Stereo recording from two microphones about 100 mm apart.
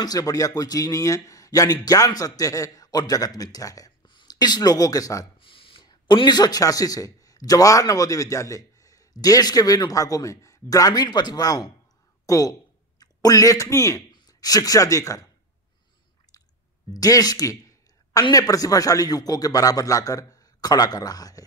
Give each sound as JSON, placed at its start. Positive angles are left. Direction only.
{"t": 0.0, "sound": "a man's voice", "side_deg": 40}
{"t": 4.0, "sound": "speech", "side_deg": 50}
{"t": 5.4, "sound": "a sound", "side_deg": 60}
{"t": 5.9, "sound": "a man's voice", "side_deg": 50}
{"t": 16.9, "sound": "a sound", "side_deg": 40}
{"t": 18.3, "sound": "a man's voice", "side_deg": 35}